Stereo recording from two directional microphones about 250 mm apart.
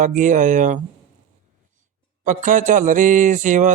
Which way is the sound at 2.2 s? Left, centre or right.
Right.